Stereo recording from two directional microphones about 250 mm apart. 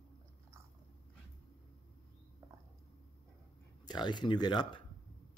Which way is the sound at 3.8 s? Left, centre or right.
Centre.